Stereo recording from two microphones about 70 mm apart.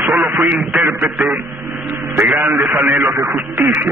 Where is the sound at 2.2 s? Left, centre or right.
Right.